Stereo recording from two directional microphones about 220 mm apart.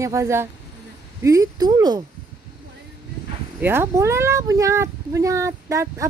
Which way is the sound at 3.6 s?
10° right (ahead or behind).